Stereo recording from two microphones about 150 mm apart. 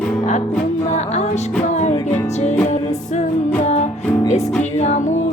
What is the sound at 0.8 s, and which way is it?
Music, 50° left (ahead or behind).